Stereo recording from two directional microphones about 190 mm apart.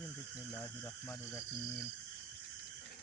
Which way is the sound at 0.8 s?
10° left (ahead or behind).